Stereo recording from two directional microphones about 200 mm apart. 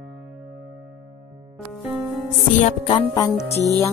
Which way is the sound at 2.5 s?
30° left (ahead or behind).